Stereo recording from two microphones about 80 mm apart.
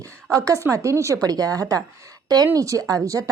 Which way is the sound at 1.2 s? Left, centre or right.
Right.